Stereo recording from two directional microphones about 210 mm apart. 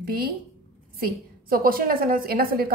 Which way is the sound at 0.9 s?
45° right (ahead or behind).